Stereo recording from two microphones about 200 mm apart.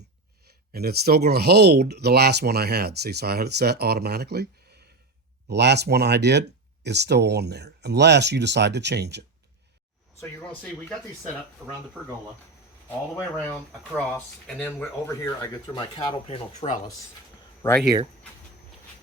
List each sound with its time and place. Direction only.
0.7 s speech: 50° right (ahead or behind)
5.5 s speech: 55° right (ahead or behind)
10.2 s speech: 5° left (ahead or behind)
13.9 s speech: 5° left (ahead or behind); by 16.8 s 35° left (ahead or behind)
17.6 s speech: 10° left (ahead or behind)